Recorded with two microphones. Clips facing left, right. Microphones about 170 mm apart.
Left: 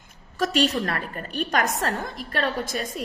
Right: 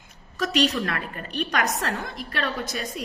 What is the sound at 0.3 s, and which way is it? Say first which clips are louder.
A woman's voice: left 1 dB; 45° left (ahead or behind).